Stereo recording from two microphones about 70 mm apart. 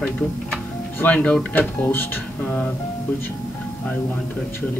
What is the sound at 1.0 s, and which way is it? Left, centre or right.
Speech, centre.